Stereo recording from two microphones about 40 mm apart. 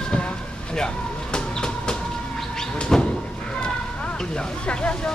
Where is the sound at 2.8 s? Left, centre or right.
Centre.